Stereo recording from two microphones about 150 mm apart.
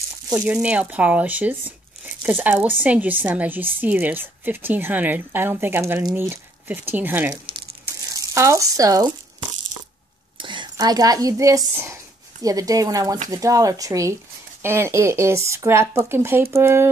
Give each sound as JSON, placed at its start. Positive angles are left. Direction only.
{"t": 0.3, "sound": "speech", "side_deg": -10}
{"t": 7.8, "sound": "a sound", "side_deg": -20}
{"t": 10.3, "sound": "a woman's voice", "side_deg": -30}